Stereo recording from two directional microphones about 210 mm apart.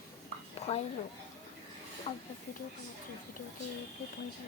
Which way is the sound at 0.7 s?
30° left (ahead or behind).